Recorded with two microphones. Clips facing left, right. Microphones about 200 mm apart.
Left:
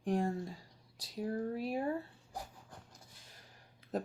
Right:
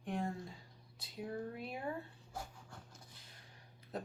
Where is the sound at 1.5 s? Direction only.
35° left (ahead or behind).